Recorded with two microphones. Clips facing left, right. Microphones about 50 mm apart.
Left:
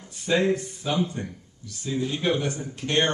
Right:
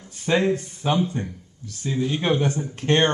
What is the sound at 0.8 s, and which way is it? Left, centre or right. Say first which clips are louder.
Speech: right 5 dB; right.